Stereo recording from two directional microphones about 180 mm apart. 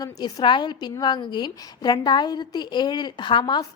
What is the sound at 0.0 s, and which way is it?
A woman's voice, 20° left (ahead or behind).